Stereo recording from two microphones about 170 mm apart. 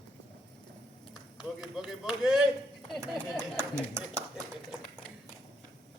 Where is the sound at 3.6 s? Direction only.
15° right (ahead or behind).